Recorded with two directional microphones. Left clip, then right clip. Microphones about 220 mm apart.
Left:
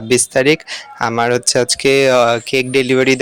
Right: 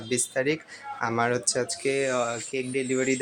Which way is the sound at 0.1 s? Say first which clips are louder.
Left 14 dB; 40° left (ahead or behind).